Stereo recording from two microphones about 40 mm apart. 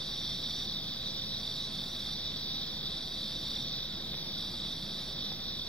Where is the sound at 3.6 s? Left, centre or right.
Left.